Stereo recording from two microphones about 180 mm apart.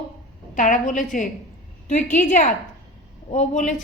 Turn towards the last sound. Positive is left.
turn(degrees=40)  # may be behind; listen again after turning